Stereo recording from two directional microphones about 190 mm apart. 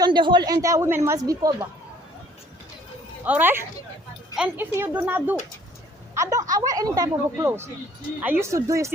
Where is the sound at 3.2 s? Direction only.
10° right (ahead or behind).